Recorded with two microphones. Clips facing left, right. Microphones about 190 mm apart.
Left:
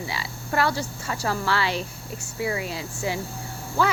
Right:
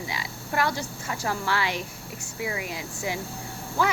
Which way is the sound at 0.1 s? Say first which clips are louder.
Left 2 dB; 15° right (ahead or behind).